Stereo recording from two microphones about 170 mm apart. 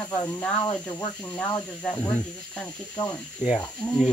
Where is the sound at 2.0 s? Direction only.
15° left (ahead or behind).